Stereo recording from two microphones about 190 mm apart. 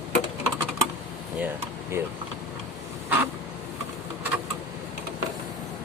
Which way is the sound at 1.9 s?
15° right (ahead or behind).